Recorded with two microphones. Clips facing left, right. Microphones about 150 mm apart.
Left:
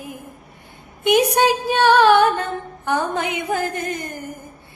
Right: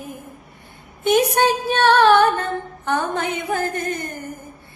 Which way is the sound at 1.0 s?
15° left (ahead or behind).